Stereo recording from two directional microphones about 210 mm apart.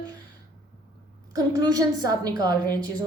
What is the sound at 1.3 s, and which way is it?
A woman's voice, 20° right (ahead or behind).